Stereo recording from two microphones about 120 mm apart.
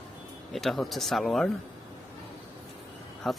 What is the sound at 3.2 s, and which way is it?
Speech, centre (ahead or behind).